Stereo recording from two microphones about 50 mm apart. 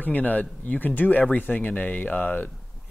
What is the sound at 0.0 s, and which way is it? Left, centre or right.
Speech, left.